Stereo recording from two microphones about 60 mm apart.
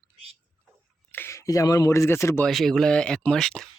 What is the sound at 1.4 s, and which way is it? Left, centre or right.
Speech, left.